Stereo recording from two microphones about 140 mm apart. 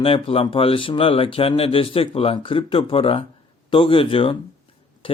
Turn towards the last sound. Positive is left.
turn(degrees=40)  # may be behind; listen again after turning